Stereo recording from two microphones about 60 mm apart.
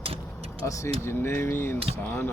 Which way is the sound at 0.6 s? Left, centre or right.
Left.